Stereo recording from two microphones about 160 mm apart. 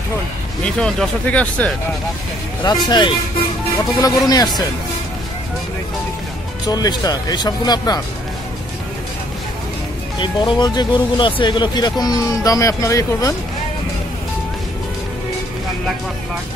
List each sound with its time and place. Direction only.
0.7 s speech: 5° left (ahead or behind)
2.6 s speech: 25° left (ahead or behind)
6.7 s speech: 25° left (ahead or behind)
10.1 s speech: 30° left (ahead or behind)